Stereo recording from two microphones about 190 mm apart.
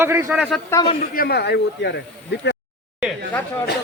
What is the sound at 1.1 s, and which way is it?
Speech, 55° left (ahead or behind).